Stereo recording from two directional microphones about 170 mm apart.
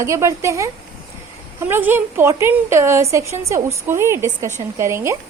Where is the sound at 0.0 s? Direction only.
15° right (ahead or behind).